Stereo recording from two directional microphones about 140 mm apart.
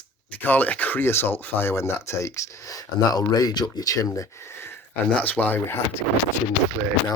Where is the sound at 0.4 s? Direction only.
10° left (ahead or behind).